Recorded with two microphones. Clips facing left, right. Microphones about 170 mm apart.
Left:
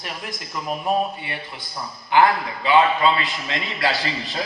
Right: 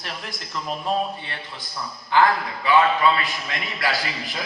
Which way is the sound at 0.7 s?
10° left (ahead or behind).